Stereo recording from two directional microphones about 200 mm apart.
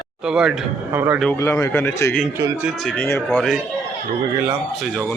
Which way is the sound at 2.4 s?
10° right (ahead or behind).